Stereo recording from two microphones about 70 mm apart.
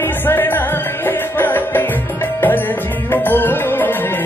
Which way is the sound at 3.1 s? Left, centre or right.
Left.